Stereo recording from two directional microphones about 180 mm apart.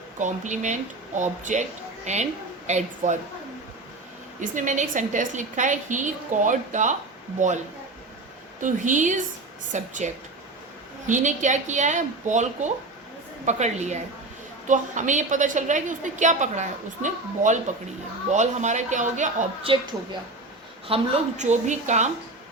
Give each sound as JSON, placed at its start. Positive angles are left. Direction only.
{"t": 0.2, "sound": "a woman's voice", "side_deg": -40}
{"t": 4.4, "sound": "a woman's voice", "side_deg": -45}
{"t": 8.6, "sound": "a woman's voice", "side_deg": -45}
{"t": 19.7, "sound": "a woman's voice", "side_deg": -30}